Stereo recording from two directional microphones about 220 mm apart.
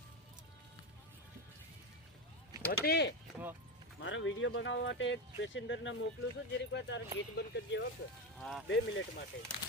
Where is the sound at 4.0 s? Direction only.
60° left (ahead or behind).